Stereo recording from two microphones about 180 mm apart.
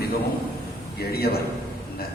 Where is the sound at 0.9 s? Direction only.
60° left (ahead or behind).